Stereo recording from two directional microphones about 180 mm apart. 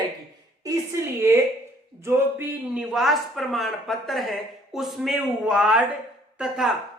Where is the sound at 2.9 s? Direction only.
Centre (ahead or behind).